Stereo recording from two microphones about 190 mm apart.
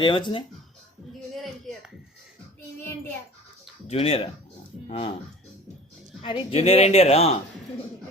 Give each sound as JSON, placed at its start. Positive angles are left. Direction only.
{"t": 0.0, "sound": "speech", "side_deg": 25}
{"t": 3.8, "sound": "speech", "side_deg": 30}
{"t": 6.2, "sound": "speech", "side_deg": 30}